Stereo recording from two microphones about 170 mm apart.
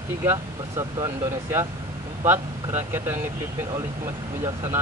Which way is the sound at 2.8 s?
10° right (ahead or behind).